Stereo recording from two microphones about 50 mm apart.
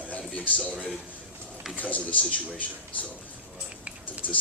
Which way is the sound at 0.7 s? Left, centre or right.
Right.